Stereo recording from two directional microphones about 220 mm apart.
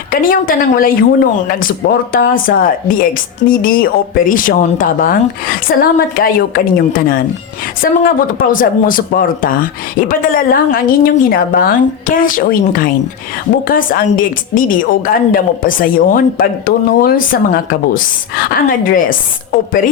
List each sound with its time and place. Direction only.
0.1 s a woman's voice: 40° left (ahead or behind)
2.1 s a woman's voice: 40° left (ahead or behind)